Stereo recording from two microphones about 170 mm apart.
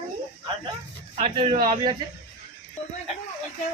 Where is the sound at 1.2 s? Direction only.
30° right (ahead or behind).